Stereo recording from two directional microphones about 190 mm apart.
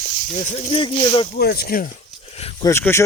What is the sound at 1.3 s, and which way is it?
Speech, 55° left (ahead or behind).